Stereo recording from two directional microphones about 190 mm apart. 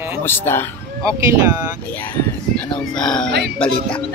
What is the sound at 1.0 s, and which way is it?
Speech, 15° right (ahead or behind).